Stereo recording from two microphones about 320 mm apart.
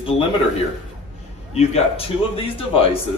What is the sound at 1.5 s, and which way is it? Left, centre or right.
Speech, centre.